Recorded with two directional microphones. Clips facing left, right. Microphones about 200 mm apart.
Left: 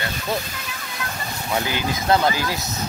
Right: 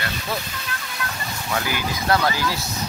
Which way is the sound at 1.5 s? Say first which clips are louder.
Left 2 dB; 25° left (ahead or behind).